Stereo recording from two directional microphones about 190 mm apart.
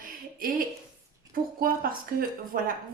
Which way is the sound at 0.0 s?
50° right (ahead or behind).